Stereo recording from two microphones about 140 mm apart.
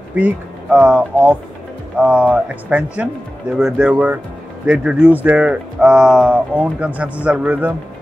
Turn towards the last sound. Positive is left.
turn(degrees=-10)  # may be behind; listen again after turning